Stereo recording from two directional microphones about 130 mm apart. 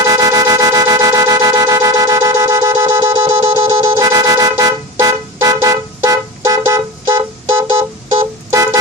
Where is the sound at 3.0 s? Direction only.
35° right (ahead or behind).